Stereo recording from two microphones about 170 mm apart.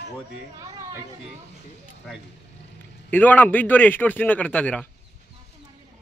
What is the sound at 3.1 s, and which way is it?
A man's voice, 10° left (ahead or behind).